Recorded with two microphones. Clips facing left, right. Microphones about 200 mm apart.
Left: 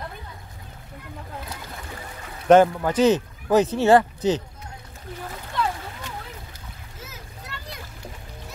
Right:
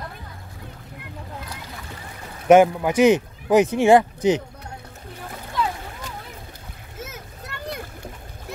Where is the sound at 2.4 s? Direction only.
10° right (ahead or behind).